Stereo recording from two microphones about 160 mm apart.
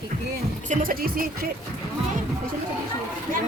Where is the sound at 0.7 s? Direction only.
60° right (ahead or behind).